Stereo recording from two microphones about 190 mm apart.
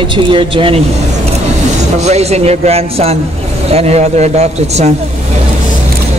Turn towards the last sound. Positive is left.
turn(degrees=-35)  # may be behind; listen again after turning